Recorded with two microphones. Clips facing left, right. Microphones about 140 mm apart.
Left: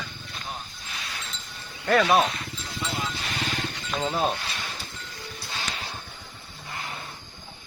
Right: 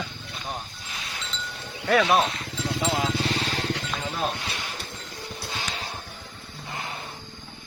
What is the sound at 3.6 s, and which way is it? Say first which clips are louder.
Music: right 6 dB; 90° right.